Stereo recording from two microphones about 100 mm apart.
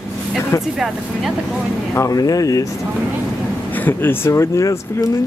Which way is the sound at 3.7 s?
20° left (ahead or behind).